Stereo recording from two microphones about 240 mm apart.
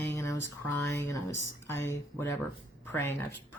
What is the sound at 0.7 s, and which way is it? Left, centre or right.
A woman's voice, centre.